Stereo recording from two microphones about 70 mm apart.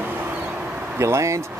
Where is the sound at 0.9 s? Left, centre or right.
Right.